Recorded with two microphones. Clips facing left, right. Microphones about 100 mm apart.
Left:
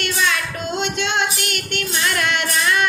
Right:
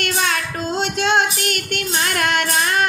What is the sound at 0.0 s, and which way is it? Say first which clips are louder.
Child singing: even; 40° right (ahead or behind).